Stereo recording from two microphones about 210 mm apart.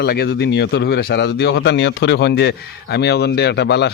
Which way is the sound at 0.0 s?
50° left (ahead or behind).